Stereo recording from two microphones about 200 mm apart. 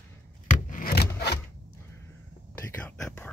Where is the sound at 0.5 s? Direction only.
40° left (ahead or behind).